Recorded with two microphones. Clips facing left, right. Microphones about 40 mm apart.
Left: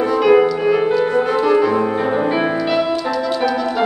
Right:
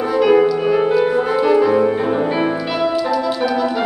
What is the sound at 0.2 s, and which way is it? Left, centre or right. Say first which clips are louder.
Music: even; centre.